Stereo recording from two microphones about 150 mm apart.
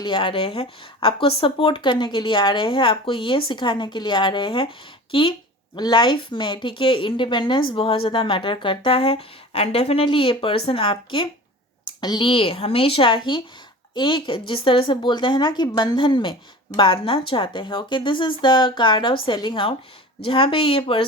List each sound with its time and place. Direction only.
0.0 s a woman's voice: 35° left (ahead or behind)